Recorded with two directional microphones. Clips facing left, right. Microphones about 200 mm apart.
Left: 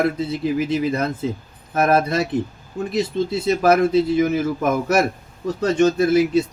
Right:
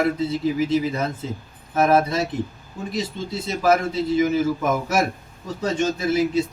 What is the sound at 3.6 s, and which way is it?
Speech, 60° left (ahead or behind).